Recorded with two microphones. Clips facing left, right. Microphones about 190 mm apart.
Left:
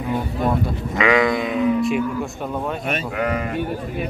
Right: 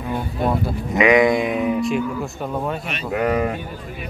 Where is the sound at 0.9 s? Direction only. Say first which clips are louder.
Right 3 dB; 20° right (ahead or behind).